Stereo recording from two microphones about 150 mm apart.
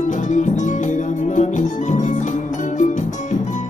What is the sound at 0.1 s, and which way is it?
Music, 55° left (ahead or behind).